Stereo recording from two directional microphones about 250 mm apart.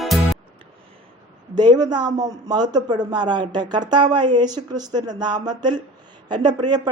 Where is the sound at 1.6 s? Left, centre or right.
Centre.